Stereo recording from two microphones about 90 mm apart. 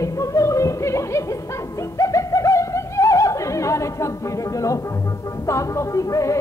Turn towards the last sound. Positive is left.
turn(degrees=35)  # may be behind; listen again after turning